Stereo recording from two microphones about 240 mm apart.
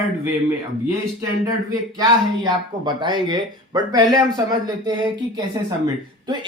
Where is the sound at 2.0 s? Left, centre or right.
Centre.